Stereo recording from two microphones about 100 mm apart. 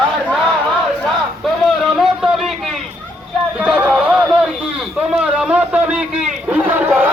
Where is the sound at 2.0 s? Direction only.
5° right (ahead or behind).